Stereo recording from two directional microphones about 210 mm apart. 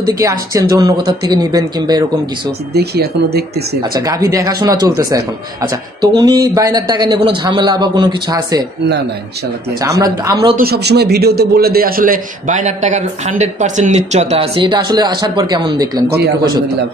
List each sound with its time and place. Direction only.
0.0 s speech: 15° right (ahead or behind)
2.7 s speech: 50° right (ahead or behind)
3.8 s speech: 15° right (ahead or behind)
9.8 s speech: 15° right (ahead or behind)
10.6 s a man's voice: 50° right (ahead or behind); by 16.0 s 20° right (ahead or behind)